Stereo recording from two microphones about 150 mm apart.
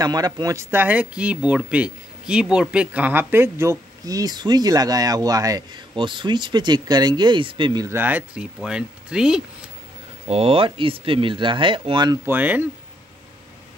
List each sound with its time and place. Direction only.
0.0 s speech: 25° right (ahead or behind); by 9.4 s 5° right (ahead or behind)
10.2 s speech: 40° right (ahead or behind)
12.3 s speech: 10° right (ahead or behind)